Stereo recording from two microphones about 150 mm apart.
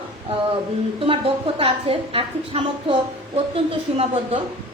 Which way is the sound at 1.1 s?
40° right (ahead or behind).